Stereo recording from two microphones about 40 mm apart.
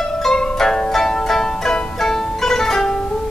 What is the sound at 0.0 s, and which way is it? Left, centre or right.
Music, centre.